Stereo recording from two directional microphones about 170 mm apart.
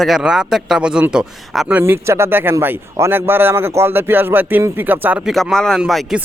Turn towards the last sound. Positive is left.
turn(degrees=0)  # may be behind; listen again after turning